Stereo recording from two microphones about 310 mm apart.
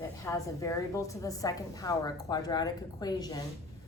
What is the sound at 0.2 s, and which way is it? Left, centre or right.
A woman's voice, centre.